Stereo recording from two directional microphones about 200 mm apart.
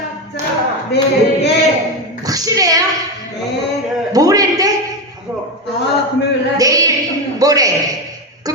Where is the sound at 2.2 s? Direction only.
20° right (ahead or behind).